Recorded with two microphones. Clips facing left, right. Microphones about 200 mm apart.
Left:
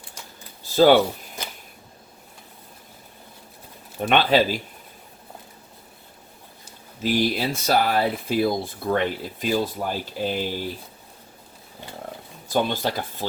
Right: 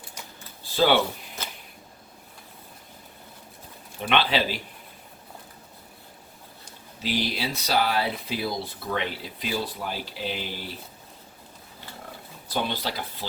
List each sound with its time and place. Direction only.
0.6 s a sound: 45° left (ahead or behind)
4.0 s speech: 45° left (ahead or behind)
7.0 s speech: 50° left (ahead or behind)
12.5 s speech: 45° left (ahead or behind)